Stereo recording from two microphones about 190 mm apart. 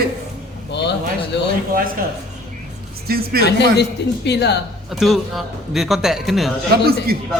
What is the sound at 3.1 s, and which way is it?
Speech, 55° right (ahead or behind).